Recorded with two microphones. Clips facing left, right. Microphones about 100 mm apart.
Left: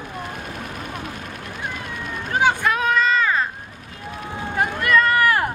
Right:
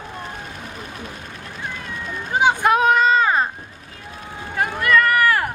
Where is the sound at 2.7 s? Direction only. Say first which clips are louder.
Right 4 dB; 20° right (ahead or behind).